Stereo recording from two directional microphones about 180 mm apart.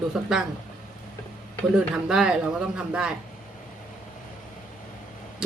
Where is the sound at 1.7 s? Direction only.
5° right (ahead or behind).